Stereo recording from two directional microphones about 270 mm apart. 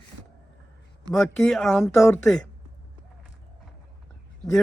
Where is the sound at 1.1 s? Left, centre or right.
Centre.